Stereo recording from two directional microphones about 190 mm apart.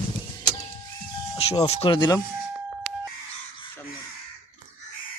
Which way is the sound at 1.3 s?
25° left (ahead or behind).